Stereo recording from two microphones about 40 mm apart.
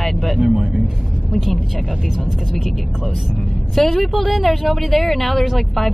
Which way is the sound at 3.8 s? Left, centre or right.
Centre.